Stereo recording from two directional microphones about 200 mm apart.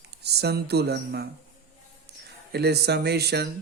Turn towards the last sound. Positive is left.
turn(degrees=-55)  # may be behind; listen again after turning